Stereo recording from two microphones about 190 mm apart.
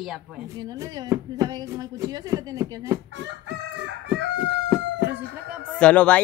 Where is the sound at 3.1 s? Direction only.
75° right (ahead or behind).